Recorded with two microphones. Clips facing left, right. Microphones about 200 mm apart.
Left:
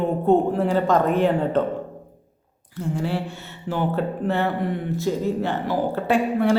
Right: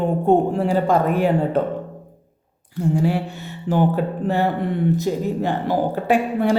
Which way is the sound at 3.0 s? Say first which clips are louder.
Right 5 dB; 15° right (ahead or behind).